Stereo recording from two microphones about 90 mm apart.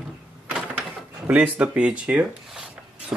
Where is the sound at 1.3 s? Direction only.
10° right (ahead or behind).